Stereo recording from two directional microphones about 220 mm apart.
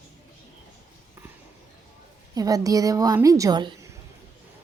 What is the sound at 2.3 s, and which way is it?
A woman's voice, 15° right (ahead or behind).